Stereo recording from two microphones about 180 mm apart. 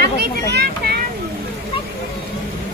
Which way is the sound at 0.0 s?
65° right (ahead or behind).